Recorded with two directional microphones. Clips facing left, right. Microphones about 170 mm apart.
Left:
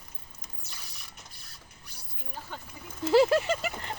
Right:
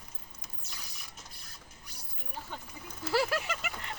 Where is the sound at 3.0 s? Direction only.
20° left (ahead or behind).